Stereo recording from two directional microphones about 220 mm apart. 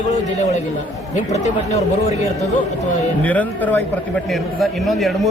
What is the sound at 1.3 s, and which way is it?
Speech, 30° left (ahead or behind).